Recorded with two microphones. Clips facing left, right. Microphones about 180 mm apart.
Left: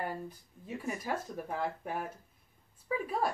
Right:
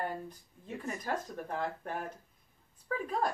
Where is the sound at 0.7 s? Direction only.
5° left (ahead or behind).